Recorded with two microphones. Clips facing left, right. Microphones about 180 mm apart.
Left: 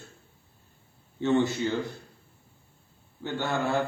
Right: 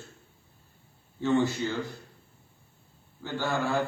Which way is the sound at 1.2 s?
20° left (ahead or behind).